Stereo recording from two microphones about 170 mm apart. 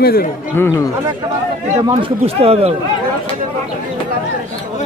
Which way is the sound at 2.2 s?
35° right (ahead or behind).